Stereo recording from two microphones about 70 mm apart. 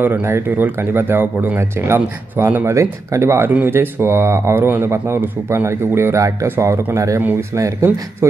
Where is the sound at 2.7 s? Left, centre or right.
Right.